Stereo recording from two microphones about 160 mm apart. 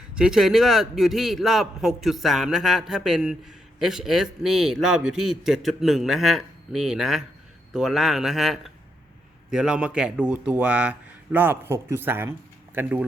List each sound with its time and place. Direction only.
0.1 s a man's voice: 5° right (ahead or behind)